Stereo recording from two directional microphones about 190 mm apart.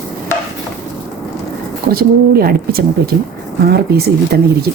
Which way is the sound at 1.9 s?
55° right (ahead or behind).